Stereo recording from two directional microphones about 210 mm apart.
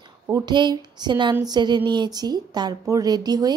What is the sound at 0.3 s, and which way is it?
A woman's voice, 20° right (ahead or behind).